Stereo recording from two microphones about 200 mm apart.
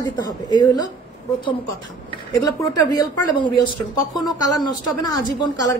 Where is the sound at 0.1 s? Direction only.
20° left (ahead or behind).